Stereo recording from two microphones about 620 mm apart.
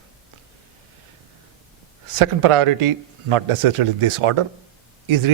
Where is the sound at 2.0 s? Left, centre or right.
Right.